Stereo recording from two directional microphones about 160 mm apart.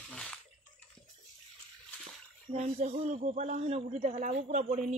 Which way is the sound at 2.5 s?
45° right (ahead or behind).